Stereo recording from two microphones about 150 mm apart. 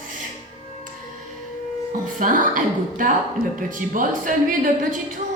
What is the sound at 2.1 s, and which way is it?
Speech, 60° right (ahead or behind).